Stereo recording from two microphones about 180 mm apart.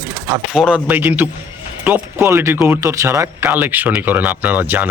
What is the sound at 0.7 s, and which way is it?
Speech, 10° right (ahead or behind).